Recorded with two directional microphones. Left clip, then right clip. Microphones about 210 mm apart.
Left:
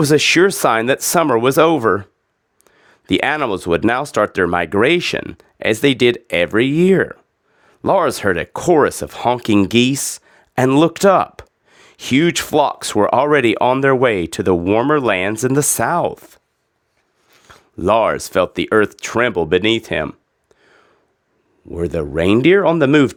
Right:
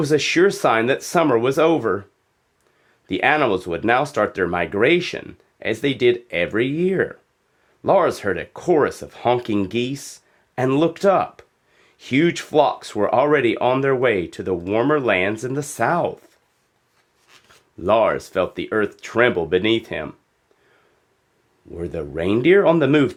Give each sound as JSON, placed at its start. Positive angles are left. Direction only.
{"t": 0.0, "sound": "speech", "side_deg": 45}
{"t": 17.5, "sound": "speech", "side_deg": 45}
{"t": 21.7, "sound": "speech", "side_deg": 45}